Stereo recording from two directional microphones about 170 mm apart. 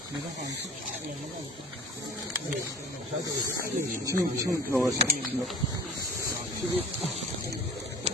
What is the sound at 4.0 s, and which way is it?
Speech, 20° right (ahead or behind).